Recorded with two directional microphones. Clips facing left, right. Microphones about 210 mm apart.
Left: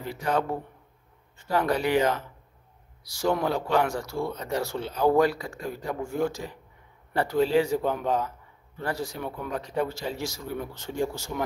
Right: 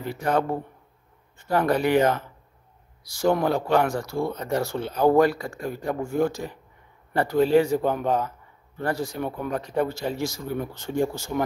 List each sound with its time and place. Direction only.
0.0 s speech: 50° right (ahead or behind)
1.5 s speech: 50° right (ahead or behind)